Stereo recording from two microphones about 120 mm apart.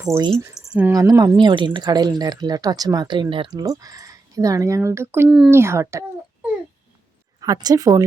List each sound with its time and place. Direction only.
0.1 s speech: 25° right (ahead or behind)
0.7 s speech: 15° right (ahead or behind)
0.9 s speech: 30° right (ahead or behind)
7.3 s speech: 30° right (ahead or behind)